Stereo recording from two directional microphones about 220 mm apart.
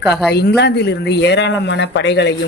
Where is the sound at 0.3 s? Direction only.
50° left (ahead or behind).